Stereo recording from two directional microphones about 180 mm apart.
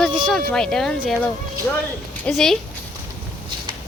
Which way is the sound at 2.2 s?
Centre (ahead or behind).